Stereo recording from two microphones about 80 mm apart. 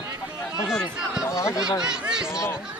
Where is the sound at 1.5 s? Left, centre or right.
Centre.